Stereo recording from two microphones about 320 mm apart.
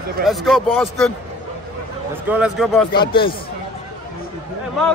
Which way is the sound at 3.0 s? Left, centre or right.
Centre.